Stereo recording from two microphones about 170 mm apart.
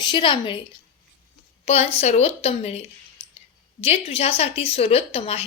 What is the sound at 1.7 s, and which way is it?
A woman's voice, 40° left (ahead or behind).